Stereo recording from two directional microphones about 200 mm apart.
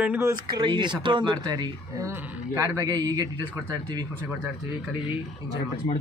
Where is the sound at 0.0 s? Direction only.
10° right (ahead or behind).